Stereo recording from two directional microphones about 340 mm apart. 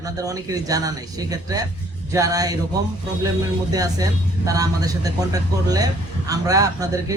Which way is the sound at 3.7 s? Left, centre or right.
Centre.